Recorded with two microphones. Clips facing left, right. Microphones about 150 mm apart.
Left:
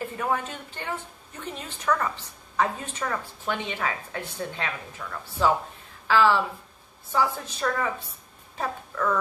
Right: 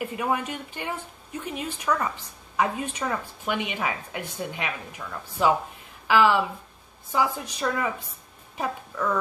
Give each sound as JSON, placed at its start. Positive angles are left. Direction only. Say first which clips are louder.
{"t": 0.0, "sound": "a woman's voice", "louder": "right 1 dB", "side_deg": -15}